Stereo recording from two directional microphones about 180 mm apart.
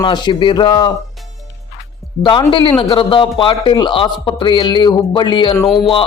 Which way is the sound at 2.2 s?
25° left (ahead or behind).